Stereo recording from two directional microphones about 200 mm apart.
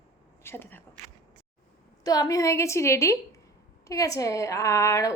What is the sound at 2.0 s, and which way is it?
A woman's voice, 20° left (ahead or behind).